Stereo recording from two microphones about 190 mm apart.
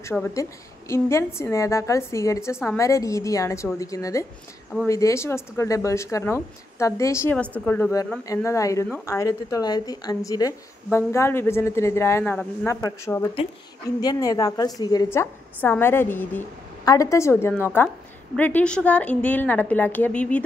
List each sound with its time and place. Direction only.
0.1 s a woman's voice: 15° left (ahead or behind)